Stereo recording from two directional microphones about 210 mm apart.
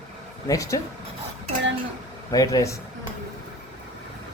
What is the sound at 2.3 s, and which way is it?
Speech, 15° left (ahead or behind).